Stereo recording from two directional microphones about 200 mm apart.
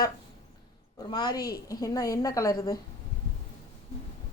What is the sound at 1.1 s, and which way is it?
A woman's voice, 20° left (ahead or behind).